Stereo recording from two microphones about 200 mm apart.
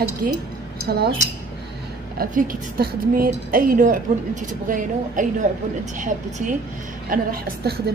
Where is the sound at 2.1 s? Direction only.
45° right (ahead or behind).